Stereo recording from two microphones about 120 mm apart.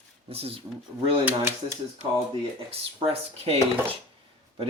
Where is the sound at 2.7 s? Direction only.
55° right (ahead or behind).